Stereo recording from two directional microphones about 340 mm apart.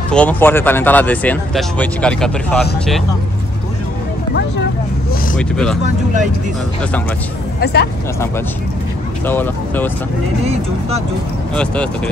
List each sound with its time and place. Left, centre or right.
0.1 s speech: centre
5.4 s speech: centre
7.6 s speech: left
9.2 s speech: centre
11.5 s speech: centre